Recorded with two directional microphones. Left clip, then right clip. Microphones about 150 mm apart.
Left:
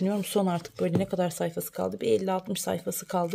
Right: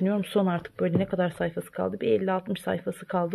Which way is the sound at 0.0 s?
20° left (ahead or behind).